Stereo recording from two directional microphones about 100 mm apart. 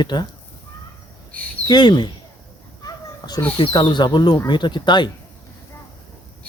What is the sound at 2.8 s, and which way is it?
Children playing, 40° left (ahead or behind).